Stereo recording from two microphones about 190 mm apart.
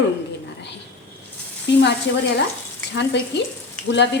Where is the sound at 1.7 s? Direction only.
65° left (ahead or behind).